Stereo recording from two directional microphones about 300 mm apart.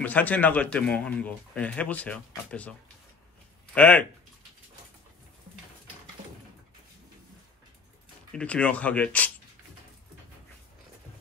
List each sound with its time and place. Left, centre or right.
0.0 s a man's voice: centre
3.7 s a man's voice: centre
8.3 s a man's voice: centre